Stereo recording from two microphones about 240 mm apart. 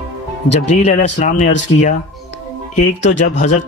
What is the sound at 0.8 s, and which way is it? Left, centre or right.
Speech, left.